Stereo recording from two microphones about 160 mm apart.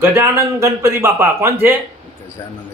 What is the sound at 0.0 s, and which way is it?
Speech, 15° right (ahead or behind).